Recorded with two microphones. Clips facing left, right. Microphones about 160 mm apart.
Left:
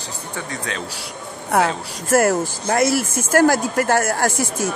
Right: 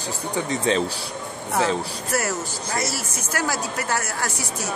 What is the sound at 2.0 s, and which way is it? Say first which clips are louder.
Speech: left 12 dB; 50° left (ahead or behind).